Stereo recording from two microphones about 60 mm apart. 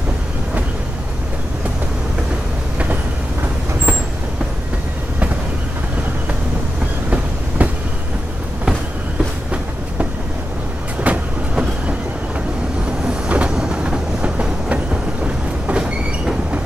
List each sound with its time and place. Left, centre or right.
7.1 s train: right
11.0 s train: right
13.0 s train: centre